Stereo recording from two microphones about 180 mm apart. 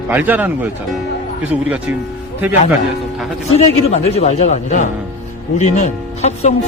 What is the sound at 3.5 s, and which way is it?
Speech, 35° left (ahead or behind).